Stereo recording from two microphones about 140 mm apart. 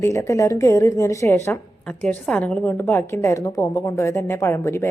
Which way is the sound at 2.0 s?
10° left (ahead or behind).